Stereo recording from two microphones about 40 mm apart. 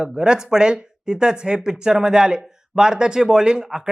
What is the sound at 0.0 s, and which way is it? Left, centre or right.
Speech, right.